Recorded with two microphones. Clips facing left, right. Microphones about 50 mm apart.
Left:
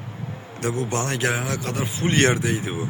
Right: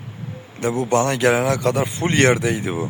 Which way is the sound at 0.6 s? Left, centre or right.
Right.